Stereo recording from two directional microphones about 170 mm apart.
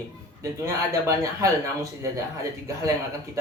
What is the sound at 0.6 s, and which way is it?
Speech, 20° right (ahead or behind).